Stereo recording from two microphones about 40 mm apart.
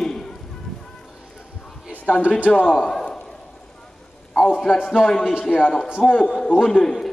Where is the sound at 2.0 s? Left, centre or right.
Left.